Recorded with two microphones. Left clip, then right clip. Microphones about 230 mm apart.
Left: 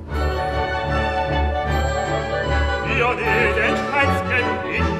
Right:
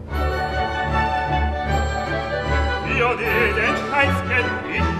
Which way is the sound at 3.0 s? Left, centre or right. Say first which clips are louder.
Even; left.